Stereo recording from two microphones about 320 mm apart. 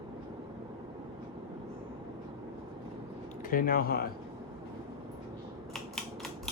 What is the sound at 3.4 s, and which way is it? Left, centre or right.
Speech, left.